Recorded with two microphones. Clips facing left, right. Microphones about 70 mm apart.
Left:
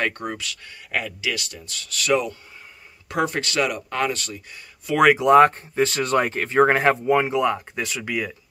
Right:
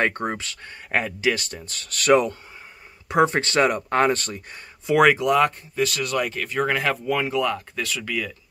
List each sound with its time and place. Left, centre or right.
0.0 s speech: right
3.1 s speech: right
4.9 s speech: right
5.3 s speech: left